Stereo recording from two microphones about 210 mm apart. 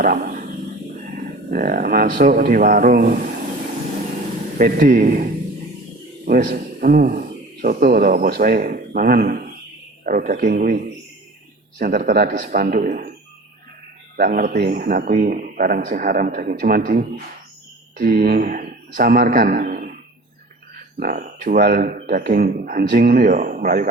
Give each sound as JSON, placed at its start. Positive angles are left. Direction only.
{"t": 0.0, "sound": "speech", "side_deg": -45}
{"t": 4.5, "sound": "a man's voice", "side_deg": -40}
{"t": 14.2, "sound": "a man's voice", "side_deg": -40}